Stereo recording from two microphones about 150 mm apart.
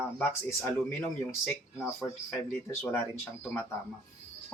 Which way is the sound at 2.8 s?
15° left (ahead or behind).